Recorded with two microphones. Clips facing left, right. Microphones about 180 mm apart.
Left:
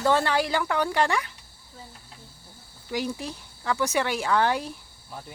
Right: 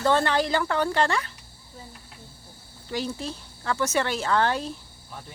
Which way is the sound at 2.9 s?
15° left (ahead or behind).